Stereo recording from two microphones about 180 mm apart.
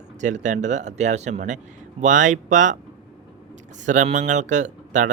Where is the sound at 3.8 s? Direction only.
45° right (ahead or behind).